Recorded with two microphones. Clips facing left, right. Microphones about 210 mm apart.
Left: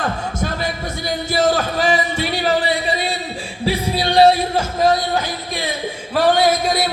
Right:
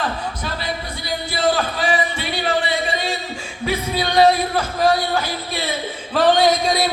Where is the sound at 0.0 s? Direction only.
45° left (ahead or behind).